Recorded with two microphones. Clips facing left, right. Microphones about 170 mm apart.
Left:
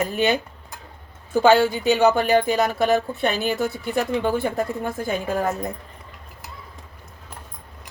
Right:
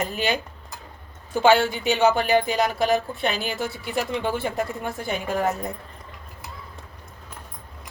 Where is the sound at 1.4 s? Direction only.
40° left (ahead or behind).